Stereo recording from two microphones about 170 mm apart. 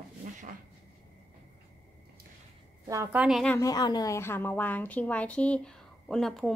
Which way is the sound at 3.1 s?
Centre (ahead or behind).